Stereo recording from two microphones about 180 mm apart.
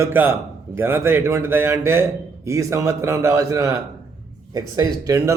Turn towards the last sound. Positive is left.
turn(degrees=-20)  # may be behind; listen again after turning